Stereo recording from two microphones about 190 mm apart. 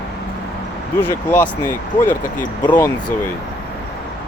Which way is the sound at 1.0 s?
10° left (ahead or behind).